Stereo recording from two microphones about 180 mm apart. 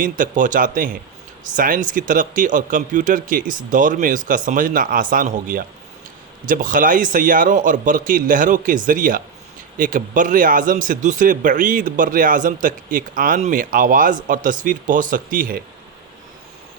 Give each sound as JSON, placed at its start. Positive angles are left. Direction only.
{"t": 0.0, "sound": "speech", "side_deg": -45}